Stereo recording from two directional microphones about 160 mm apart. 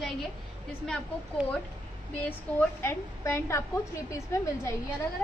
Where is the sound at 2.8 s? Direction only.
15° left (ahead or behind).